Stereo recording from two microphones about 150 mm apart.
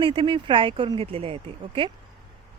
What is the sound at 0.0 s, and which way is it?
Speech, 35° right (ahead or behind).